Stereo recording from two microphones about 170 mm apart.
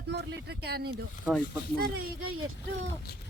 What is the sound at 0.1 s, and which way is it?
Speech, 80° right.